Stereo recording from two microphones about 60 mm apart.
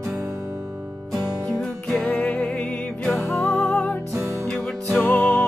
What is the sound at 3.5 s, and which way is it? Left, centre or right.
Music, left.